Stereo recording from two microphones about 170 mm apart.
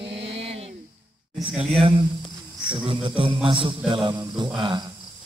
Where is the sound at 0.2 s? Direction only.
35° right (ahead or behind).